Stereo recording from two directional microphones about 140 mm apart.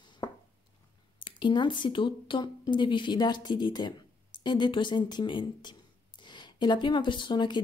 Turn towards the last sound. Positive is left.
turn(degrees=30)  # may be behind; listen again after turning